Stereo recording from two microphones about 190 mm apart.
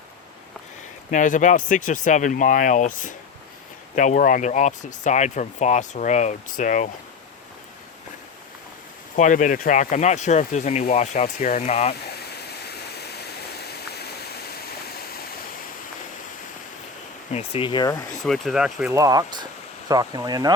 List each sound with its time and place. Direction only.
1.1 s speech: 40° left (ahead or behind)
9.1 s speech: 40° left (ahead or behind)
11.6 s speech: 35° left (ahead or behind)
11.9 s waterfall: 60° left (ahead or behind)
17.3 s speech: 30° left (ahead or behind)
18.1 s speech: centre (ahead or behind)
18.9 s speech: 15° right (ahead or behind)